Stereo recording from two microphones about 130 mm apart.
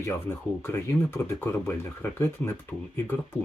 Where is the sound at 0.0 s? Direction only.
20° left (ahead or behind).